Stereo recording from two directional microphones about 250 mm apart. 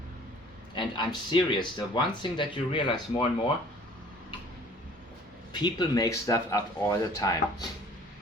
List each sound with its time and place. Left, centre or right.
0.8 s speech: centre
5.5 s speech: centre